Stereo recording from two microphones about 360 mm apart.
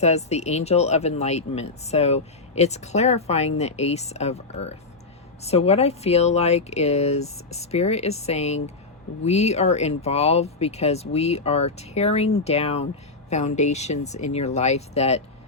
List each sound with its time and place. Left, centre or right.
0.0 s speech: centre